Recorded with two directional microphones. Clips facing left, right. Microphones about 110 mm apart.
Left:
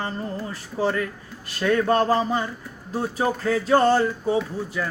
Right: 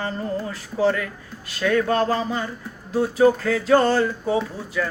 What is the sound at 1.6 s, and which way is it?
Speech, 35° left (ahead or behind).